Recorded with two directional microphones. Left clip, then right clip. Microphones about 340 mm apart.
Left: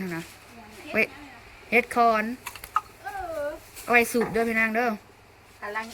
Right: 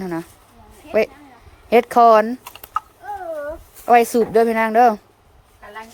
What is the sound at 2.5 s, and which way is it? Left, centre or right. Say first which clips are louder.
Typing: right 2 dB; right.